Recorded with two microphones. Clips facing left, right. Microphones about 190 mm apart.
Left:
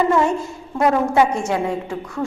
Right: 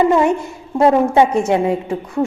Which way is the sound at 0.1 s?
15° right (ahead or behind).